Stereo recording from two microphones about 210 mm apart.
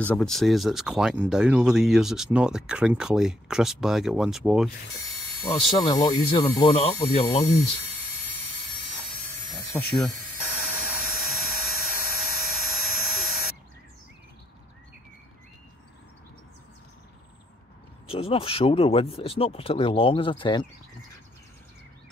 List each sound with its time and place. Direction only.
0.0 s speech: 5° left (ahead or behind)
5.4 s speech: 15° left (ahead or behind)
9.5 s speech: 15° left (ahead or behind)
10.6 s a sound: 5° right (ahead or behind)
18.0 s speech: 30° left (ahead or behind)